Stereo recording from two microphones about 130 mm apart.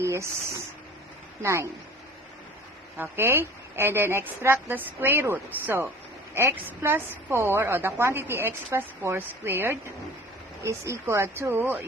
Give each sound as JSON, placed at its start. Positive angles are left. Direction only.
{"t": 0.0, "sound": "speech", "side_deg": -20}
{"t": 3.0, "sound": "a woman's voice", "side_deg": -15}